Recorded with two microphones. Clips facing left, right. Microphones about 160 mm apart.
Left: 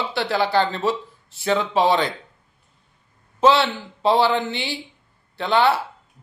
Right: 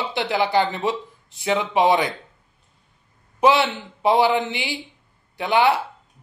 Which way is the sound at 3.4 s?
15° right (ahead or behind).